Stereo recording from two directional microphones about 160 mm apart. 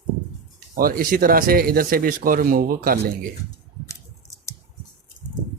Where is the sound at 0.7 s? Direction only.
60° right (ahead or behind); by 3.1 s 80° right.